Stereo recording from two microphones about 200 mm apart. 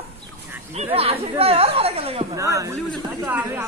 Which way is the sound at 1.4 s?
30° right (ahead or behind).